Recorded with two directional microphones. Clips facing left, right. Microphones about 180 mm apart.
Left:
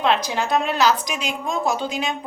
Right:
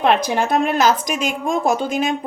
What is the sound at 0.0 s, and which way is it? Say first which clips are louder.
A woman's voice: right 4 dB; 55° right (ahead or behind).